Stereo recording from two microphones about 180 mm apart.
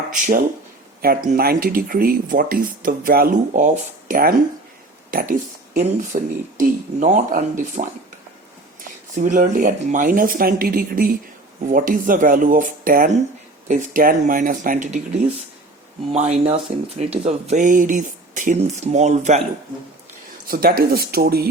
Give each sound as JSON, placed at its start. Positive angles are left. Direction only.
{"t": 0.1, "sound": "speech", "side_deg": -50}
{"t": 9.1, "sound": "speech", "side_deg": -45}
{"t": 16.1, "sound": "speech", "side_deg": -35}
{"t": 20.5, "sound": "speech", "side_deg": -55}